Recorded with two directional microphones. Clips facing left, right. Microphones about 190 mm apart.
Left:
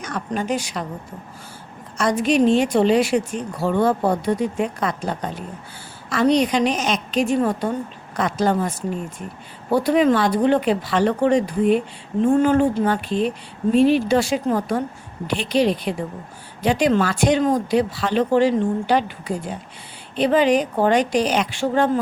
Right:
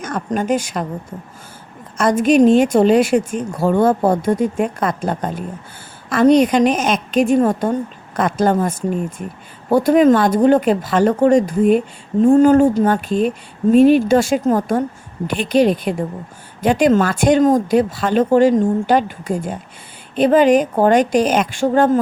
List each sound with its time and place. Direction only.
0.0 s a woman's voice: 50° right (ahead or behind)
2.0 s a woman's voice: 50° right (ahead or behind)